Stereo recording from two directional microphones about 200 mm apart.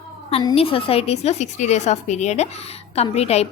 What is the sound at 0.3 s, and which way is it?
A woman's voice, 30° left (ahead or behind).